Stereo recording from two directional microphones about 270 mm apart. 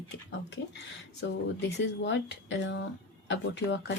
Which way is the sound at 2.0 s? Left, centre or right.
Left.